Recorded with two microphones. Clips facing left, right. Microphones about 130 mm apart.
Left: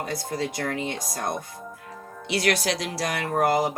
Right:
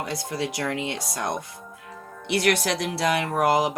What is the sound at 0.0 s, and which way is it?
Speech, 75° right (ahead or behind).